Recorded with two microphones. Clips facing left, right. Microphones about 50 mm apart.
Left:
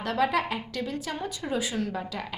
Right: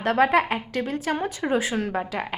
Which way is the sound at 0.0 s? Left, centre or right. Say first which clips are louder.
Right 6 dB; right.